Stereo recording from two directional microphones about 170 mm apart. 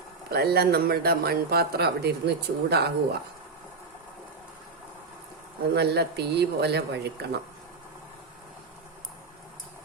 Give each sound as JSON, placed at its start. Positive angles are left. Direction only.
{"t": 0.3, "sound": "speech", "side_deg": -65}
{"t": 5.7, "sound": "speech", "side_deg": -75}